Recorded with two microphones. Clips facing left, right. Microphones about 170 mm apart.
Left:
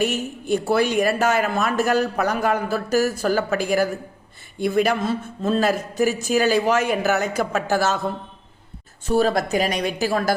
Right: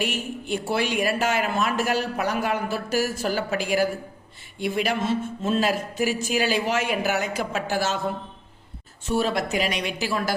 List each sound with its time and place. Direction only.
0.0 s speech: 45° left (ahead or behind)
9.0 s speech: 40° left (ahead or behind)